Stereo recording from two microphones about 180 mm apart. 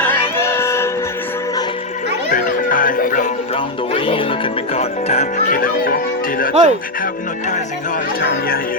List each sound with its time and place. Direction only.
0.0 s music: 10° left (ahead or behind)
2.3 s music: 50° left (ahead or behind)
3.5 s music: 30° left (ahead or behind)
5.5 s speech: 55° left (ahead or behind)
6.5 s speech: 40° right (ahead or behind)
8.2 s speech: 60° left (ahead or behind)